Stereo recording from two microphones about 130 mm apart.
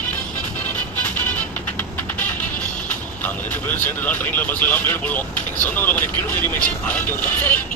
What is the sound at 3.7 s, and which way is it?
Speech, 15° left (ahead or behind).